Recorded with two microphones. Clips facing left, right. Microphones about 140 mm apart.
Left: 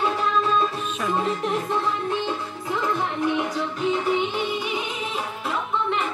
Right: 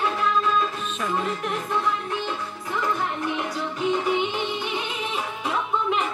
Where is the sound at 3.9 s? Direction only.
Centre (ahead or behind).